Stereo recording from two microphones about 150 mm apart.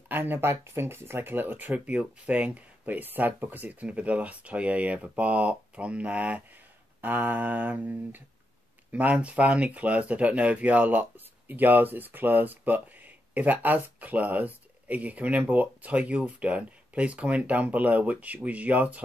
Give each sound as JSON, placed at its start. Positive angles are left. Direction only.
{"t": 0.1, "sound": "speech", "side_deg": -15}